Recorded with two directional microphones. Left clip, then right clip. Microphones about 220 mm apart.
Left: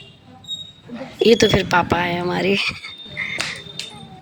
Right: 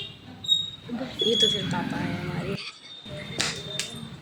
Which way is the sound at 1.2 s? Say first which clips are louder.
Left 9 dB; 35° left (ahead or behind).